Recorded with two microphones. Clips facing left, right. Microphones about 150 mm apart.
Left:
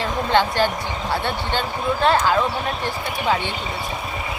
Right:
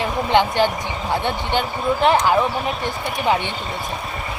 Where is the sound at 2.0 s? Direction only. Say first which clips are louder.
Right 2 dB; 15° right (ahead or behind).